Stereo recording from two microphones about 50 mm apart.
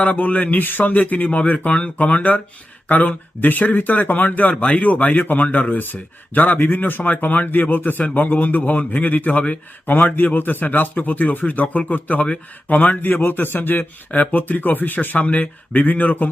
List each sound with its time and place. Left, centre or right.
0.0 s speech: left